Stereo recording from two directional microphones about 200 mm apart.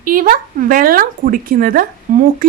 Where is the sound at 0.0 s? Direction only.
45° right (ahead or behind).